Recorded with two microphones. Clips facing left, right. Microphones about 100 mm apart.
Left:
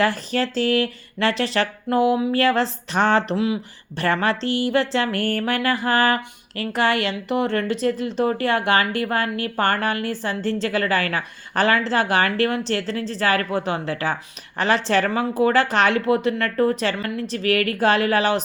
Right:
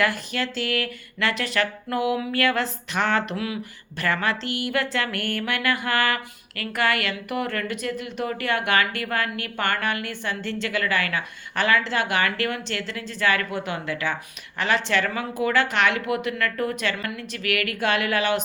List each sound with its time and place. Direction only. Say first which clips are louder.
0.0 s speech: left 4 dB; 35° left (ahead or behind)